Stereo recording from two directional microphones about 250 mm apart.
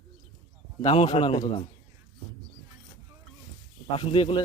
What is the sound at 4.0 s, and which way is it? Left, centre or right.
Speech, left.